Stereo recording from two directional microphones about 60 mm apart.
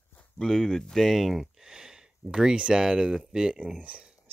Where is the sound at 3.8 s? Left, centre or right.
Right.